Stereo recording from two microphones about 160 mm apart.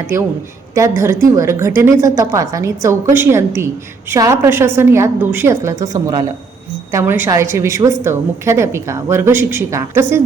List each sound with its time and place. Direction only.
0.7 s a woman's voice: 20° right (ahead or behind)